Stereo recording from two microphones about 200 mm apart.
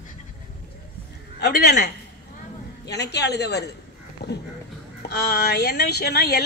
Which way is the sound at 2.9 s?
55° left (ahead or behind).